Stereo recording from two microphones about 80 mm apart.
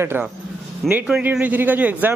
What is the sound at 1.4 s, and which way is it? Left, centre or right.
Speech, right.